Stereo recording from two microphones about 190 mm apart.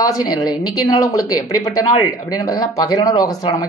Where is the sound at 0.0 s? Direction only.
20° left (ahead or behind).